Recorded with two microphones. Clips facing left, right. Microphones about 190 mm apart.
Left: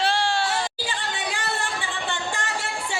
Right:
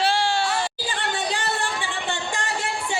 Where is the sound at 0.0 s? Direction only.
5° right (ahead or behind).